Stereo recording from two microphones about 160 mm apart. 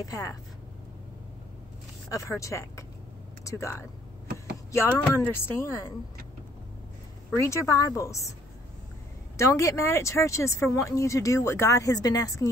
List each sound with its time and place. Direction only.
0.0 s speech: 20° left (ahead or behind)
2.0 s speech: 20° left (ahead or behind)
4.9 s speech: 15° left (ahead or behind)
7.4 s speech: 20° left (ahead or behind)
9.4 s speech: 20° left (ahead or behind)